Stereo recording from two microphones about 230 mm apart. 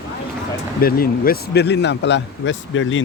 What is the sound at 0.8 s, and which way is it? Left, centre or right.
Speech, left.